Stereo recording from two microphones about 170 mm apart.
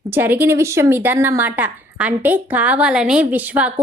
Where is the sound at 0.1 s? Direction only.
10° right (ahead or behind).